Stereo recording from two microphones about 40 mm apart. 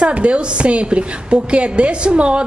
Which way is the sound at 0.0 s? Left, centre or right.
Right.